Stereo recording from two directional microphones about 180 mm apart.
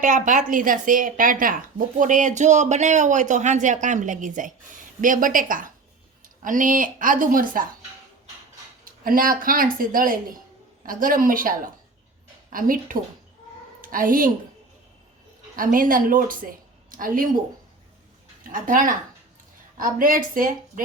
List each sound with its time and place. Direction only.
0.0 s speech: 45° right (ahead or behind)
8.8 s a woman's voice: 50° right (ahead or behind)
15.5 s speech: 50° right (ahead or behind)
18.4 s speech: 50° right (ahead or behind)